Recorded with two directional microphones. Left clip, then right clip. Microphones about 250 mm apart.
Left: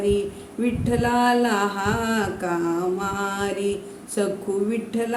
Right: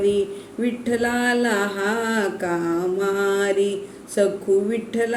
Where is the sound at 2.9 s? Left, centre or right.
Left.